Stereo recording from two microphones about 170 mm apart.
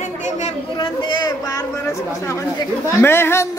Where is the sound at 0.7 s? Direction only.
30° left (ahead or behind).